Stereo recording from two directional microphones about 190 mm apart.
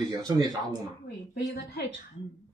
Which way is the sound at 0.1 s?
20° right (ahead or behind).